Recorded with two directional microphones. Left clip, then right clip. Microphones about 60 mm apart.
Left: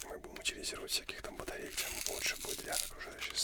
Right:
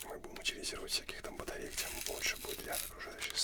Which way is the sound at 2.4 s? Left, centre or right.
Left.